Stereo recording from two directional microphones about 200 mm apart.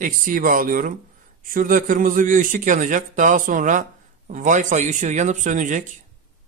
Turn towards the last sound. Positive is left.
turn(degrees=-40)  # may be behind; listen again after turning